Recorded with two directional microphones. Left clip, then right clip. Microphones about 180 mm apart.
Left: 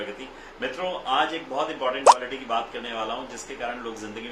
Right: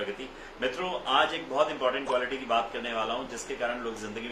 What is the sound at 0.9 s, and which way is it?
A man's voice, 15° right (ahead or behind).